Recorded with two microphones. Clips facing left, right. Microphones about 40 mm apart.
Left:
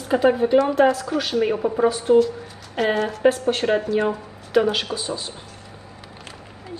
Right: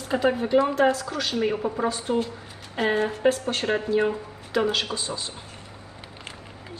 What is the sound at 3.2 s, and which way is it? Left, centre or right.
Speech, centre.